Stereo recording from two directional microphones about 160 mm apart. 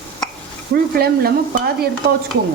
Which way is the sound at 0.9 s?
75° right (ahead or behind).